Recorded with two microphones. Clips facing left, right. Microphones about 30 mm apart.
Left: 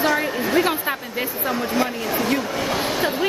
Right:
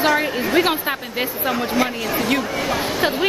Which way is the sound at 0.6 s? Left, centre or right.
Right.